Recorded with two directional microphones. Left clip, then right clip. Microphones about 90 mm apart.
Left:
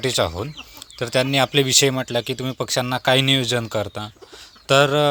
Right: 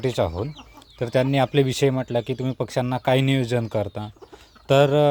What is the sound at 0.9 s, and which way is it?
Speech, 40° right (ahead or behind).